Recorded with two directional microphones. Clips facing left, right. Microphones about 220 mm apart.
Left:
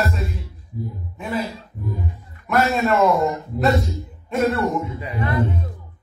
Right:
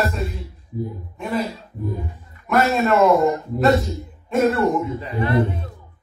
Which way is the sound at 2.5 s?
Centre (ahead or behind).